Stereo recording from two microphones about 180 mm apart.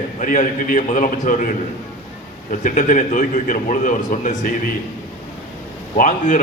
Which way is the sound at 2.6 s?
45° left (ahead or behind).